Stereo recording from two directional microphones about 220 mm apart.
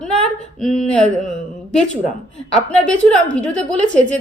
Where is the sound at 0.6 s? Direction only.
Centre (ahead or behind).